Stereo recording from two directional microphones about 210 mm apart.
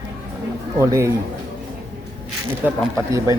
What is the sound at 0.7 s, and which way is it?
Speech, 15° right (ahead or behind).